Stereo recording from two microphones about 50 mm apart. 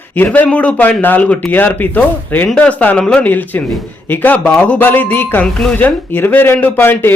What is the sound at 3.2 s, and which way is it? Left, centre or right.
Speech, left.